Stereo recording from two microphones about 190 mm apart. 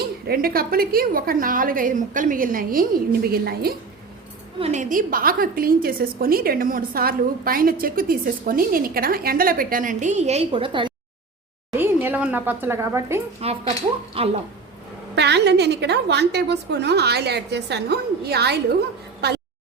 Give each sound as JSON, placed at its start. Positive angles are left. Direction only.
{"t": 0.3, "sound": "a woman's voice", "side_deg": -50}
{"t": 4.6, "sound": "a woman's voice", "side_deg": -40}
{"t": 11.7, "sound": "a woman's voice", "side_deg": -10}
{"t": 13.4, "sound": "speech", "side_deg": -30}
{"t": 15.1, "sound": "a woman's voice", "side_deg": -60}